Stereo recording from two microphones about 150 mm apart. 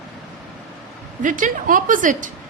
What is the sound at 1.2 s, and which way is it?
A woman's voice, 60° right (ahead or behind).